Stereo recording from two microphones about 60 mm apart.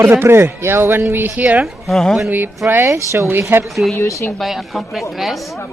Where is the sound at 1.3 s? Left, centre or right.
Right.